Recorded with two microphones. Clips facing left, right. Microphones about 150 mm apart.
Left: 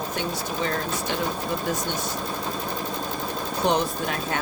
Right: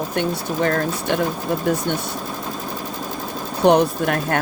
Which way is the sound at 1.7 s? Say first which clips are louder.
Right 9 dB; 60° right (ahead or behind).